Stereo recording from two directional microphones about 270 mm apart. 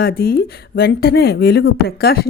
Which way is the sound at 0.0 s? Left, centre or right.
Left.